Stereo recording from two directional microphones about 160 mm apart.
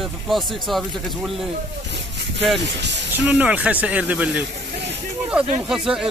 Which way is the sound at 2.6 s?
90° right.